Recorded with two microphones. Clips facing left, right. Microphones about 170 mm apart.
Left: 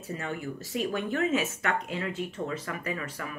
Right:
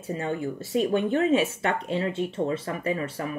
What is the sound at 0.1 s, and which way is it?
Speech, 25° right (ahead or behind).